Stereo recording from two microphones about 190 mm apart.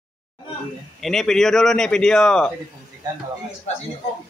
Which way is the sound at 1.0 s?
Centre (ahead or behind).